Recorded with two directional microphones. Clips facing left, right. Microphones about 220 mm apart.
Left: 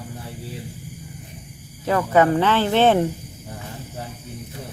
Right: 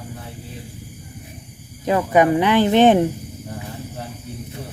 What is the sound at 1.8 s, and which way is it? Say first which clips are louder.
Speech: right 1 dB; 15° right (ahead or behind).